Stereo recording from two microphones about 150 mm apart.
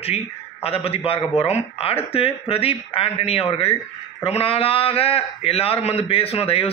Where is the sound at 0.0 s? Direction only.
40° left (ahead or behind).